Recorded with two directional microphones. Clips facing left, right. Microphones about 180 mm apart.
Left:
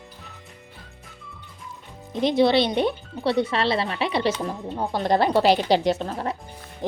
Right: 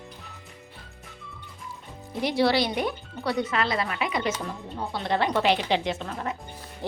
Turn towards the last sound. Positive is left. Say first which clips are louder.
# left 5 dB
turn(degrees=15)  # may be behind; listen again after turning